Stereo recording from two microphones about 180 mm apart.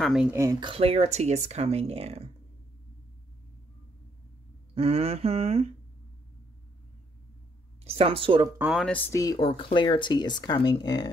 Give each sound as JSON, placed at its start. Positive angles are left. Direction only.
{"t": 0.0, "sound": "speech", "side_deg": -5}
{"t": 0.3, "sound": "speech", "side_deg": -15}
{"t": 4.7, "sound": "speech", "side_deg": -35}
{"t": 7.8, "sound": "a woman's voice", "side_deg": -35}
{"t": 8.5, "sound": "speech", "side_deg": -5}
{"t": 9.4, "sound": "speech", "side_deg": 30}